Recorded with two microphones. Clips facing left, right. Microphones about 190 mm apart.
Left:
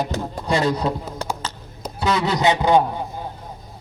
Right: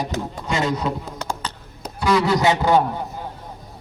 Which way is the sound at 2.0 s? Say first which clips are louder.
Right 2 dB; 20° left (ahead or behind).